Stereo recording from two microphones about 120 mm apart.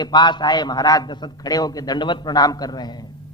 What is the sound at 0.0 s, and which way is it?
A man's voice, 35° left (ahead or behind).